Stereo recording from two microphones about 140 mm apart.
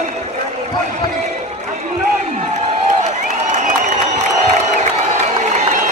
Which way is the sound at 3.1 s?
60° right (ahead or behind).